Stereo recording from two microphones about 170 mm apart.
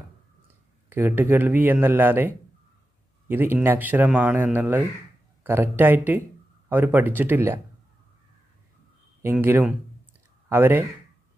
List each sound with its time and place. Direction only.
0.8 s speech: 10° right (ahead or behind)
9.2 s speech: 10° right (ahead or behind)